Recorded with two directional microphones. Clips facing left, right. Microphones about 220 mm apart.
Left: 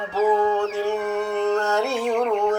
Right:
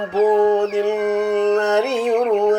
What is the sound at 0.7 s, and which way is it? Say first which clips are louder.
Mantra: right 5 dB; 20° right (ahead or behind).